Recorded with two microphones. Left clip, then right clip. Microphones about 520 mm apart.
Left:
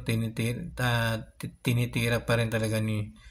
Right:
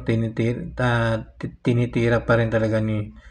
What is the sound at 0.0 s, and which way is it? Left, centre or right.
Speech, left.